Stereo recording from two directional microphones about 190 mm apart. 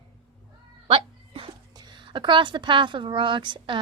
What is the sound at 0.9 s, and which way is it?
Dog, 30° right (ahead or behind).